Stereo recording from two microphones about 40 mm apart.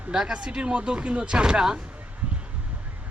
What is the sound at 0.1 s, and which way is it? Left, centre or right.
Speech, centre.